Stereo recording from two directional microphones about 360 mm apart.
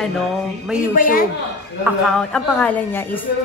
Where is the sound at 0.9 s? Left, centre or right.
Left.